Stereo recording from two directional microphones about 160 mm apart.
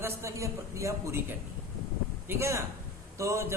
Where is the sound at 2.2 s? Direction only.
15° right (ahead or behind).